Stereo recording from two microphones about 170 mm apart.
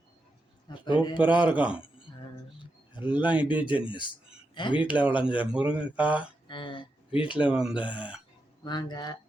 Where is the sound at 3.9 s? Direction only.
30° left (ahead or behind).